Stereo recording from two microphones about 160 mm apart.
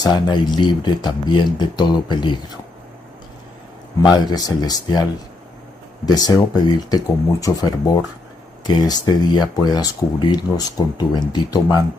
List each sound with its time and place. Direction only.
0.0 s speech: 25° left (ahead or behind)
4.0 s speech: 25° left (ahead or behind)
6.0 s speech: 25° left (ahead or behind)